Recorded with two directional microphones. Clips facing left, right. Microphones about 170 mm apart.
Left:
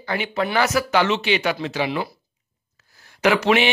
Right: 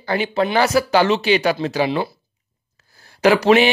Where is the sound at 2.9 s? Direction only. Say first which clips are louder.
Right 4 dB; 35° right (ahead or behind).